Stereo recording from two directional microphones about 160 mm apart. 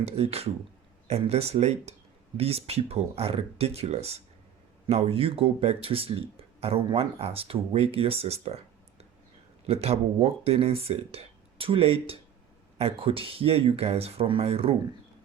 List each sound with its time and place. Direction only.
0.0 s speech: 40° right (ahead or behind)
9.6 s speech: 40° right (ahead or behind)